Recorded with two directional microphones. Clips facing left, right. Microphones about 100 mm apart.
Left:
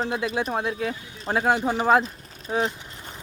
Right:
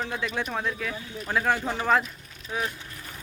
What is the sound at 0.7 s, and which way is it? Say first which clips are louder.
Speech: left 3 dB; 35° left (ahead or behind).